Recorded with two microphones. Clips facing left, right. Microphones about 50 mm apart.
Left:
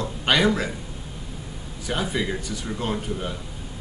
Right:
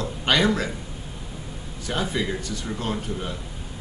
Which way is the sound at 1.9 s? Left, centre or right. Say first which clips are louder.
Even; centre.